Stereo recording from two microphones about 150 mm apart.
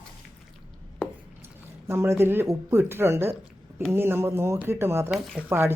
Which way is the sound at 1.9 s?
15° right (ahead or behind).